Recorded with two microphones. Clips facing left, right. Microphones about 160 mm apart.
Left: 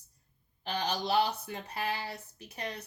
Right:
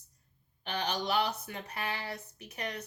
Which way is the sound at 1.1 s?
30° left (ahead or behind).